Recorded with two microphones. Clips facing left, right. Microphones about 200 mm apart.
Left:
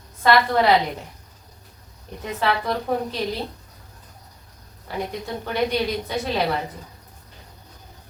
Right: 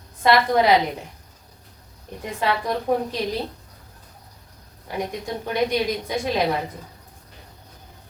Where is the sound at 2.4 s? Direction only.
15° right (ahead or behind).